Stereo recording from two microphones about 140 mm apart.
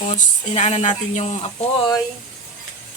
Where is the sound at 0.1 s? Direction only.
50° left (ahead or behind).